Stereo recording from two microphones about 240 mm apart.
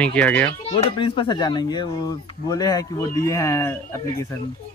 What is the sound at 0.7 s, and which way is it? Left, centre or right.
Speech, left.